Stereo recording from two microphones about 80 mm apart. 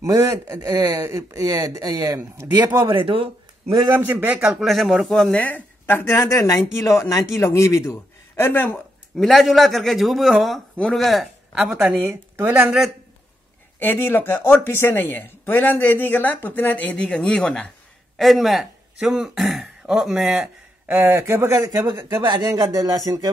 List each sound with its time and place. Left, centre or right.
0.0 s speech: right
2.8 s speech: right
3.9 s a man's voice: right
4.6 s speech: centre
5.4 s speech: left
9.1 s speech: centre
12.4 s a man's voice: right
13.7 s speech: left; by 20.4 s centre
20.9 s a man's voice: right
21.5 s speech: right
22.5 s speech: right